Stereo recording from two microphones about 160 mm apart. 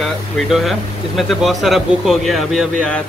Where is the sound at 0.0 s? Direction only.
Centre (ahead or behind).